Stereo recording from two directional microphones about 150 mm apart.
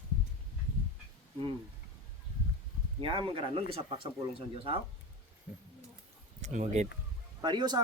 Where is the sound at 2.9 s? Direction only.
35° right (ahead or behind).